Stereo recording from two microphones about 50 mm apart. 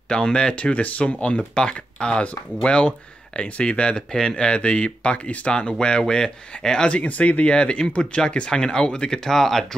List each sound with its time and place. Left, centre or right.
0.1 s speech: centre
6.9 s speech: left
9.3 s speech: centre